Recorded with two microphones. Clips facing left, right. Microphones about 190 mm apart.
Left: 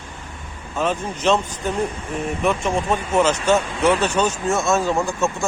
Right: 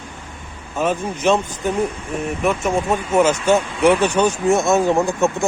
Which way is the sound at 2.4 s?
5° right (ahead or behind).